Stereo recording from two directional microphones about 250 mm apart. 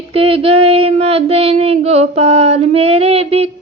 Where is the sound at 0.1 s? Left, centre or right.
Right.